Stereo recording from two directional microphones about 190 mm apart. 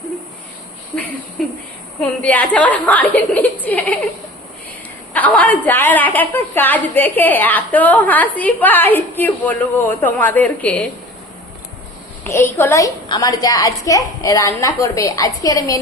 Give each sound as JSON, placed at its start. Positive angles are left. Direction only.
{"t": 2.0, "sound": "a woman's voice", "side_deg": 10}
{"t": 5.1, "sound": "a woman's voice", "side_deg": 10}
{"t": 12.2, "sound": "a woman's voice", "side_deg": 15}